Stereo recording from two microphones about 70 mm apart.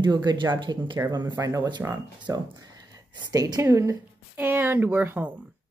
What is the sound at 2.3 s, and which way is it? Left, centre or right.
Speech, right.